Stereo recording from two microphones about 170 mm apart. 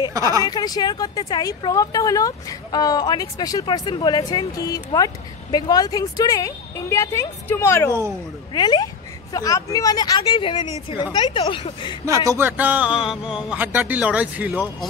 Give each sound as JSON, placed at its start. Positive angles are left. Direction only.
{"t": 0.1, "sound": "speech", "side_deg": -20}
{"t": 0.4, "sound": "speech", "side_deg": 25}
{"t": 12.1, "sound": "a man's voice", "side_deg": -20}